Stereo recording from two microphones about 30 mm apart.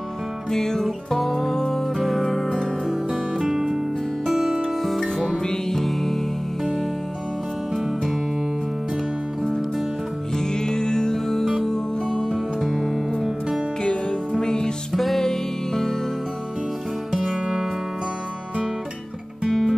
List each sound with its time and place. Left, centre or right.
0.5 s music: centre
1.1 s music: centre
4.3 s music: centre
4.6 s music: centre
5.4 s music: left
5.8 s music: centre
10.3 s music: left
12.5 s music: centre
14.4 s music: left
14.9 s music: centre
15.1 s music: centre
17.1 s music: centre
19.4 s guitar: centre